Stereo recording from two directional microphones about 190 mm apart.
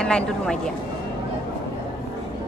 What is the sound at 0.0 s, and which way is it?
Speech, 5° left (ahead or behind).